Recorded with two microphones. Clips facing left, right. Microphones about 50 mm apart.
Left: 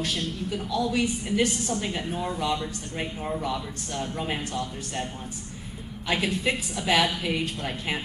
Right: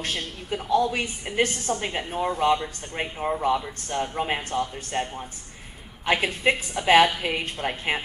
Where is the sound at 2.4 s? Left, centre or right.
Right.